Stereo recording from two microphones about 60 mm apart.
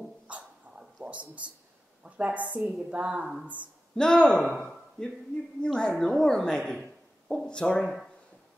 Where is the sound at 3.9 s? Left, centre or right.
Centre.